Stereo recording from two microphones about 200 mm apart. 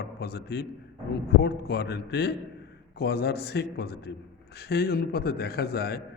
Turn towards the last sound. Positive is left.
turn(degrees=55)  # may be behind; listen again after turning